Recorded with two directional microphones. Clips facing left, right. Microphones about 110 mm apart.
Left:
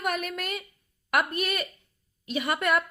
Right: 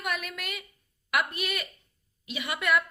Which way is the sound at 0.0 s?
45° left (ahead or behind).